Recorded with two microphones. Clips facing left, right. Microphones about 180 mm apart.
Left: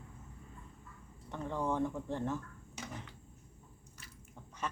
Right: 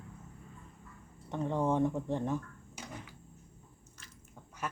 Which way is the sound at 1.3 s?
20° right (ahead or behind).